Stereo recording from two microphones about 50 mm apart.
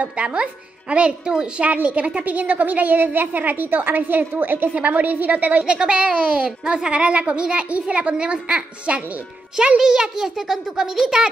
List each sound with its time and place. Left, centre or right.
0.0 s a woman's voice: right
5.6 s a woman's voice: centre
9.8 s a child's voice: centre